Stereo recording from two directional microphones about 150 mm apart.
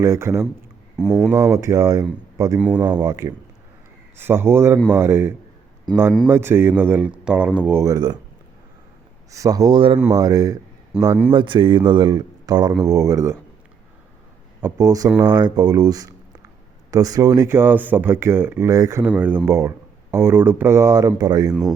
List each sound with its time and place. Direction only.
0.0 s speech: 20° right (ahead or behind)
0.9 s speech: 5° right (ahead or behind)
1.5 s speech: 20° right (ahead or behind)
2.6 s speech: 10° right (ahead or behind)
3.0 s speech: 25° right (ahead or behind)
4.2 s speech: 15° right (ahead or behind)
9.3 s speech: 25° right (ahead or behind)
11.3 s speech: 35° right (ahead or behind)
14.6 s speech: 25° right (ahead or behind)